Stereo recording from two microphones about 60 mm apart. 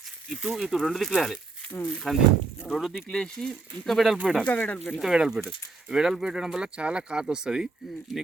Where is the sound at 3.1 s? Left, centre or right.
Centre.